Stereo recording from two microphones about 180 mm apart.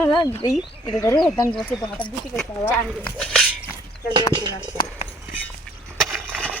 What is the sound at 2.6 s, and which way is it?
Speech, 5° left (ahead or behind).